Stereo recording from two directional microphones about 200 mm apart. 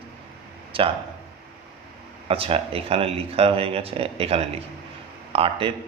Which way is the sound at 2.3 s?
30° right (ahead or behind).